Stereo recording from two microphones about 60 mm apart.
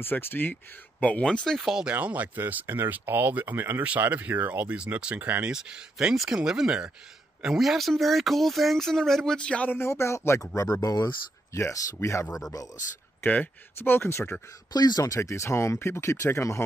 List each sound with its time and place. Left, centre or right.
0.0 s speech: left
1.0 s speech: centre
1.6 s speech: centre
1.9 s speech: right
5.5 s speech: centre
7.4 s speech: centre
9.4 s speech: centre
9.7 s speech: left
11.5 s speech: left
13.2 s speech: left
14.7 s speech: left
15.1 s speech: left